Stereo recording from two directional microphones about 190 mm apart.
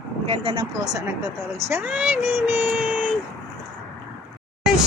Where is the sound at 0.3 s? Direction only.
25° right (ahead or behind); by 2.9 s 10° right (ahead or behind).